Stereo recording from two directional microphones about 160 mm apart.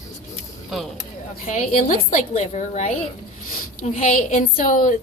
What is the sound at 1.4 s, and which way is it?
A woman's voice, 50° left (ahead or behind).